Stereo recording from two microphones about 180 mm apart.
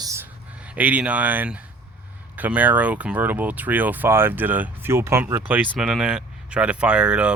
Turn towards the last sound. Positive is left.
turn(degrees=-5)  # may be behind; listen again after turning